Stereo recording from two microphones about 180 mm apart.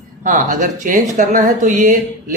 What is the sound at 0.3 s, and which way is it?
Speech, 45° right (ahead or behind).